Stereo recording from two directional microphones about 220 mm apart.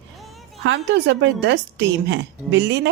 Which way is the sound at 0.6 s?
55° right (ahead or behind).